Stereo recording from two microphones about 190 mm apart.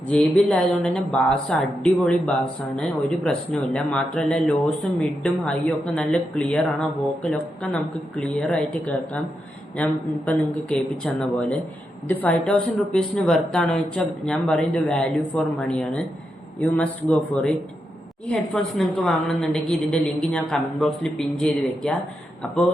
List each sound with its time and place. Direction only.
0.1 s speech: 5° left (ahead or behind)